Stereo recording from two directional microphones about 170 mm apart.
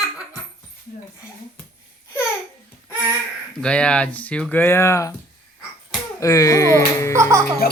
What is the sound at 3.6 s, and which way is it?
Speech, 5° left (ahead or behind).